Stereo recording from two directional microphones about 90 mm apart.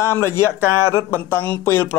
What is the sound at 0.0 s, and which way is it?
A man's voice, 25° left (ahead or behind).